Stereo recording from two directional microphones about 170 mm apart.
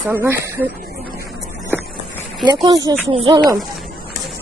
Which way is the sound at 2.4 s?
25° right (ahead or behind).